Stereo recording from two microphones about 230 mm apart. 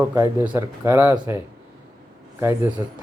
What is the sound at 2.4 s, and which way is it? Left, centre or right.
Speech, centre.